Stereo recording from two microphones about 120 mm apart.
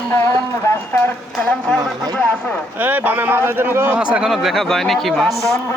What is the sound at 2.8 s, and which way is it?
Speech, 15° right (ahead or behind).